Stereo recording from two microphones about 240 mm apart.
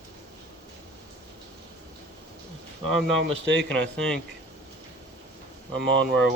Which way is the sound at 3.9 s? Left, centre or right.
Centre.